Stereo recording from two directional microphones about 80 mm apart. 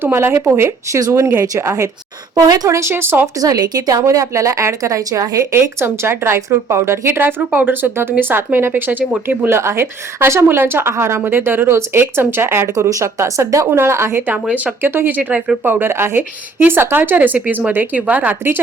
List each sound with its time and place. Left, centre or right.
0.0 s a woman's voice: right
3.4 s a woman's voice: right
5.5 s a woman's voice: right